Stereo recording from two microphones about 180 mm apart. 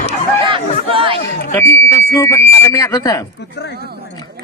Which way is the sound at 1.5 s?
10° left (ahead or behind).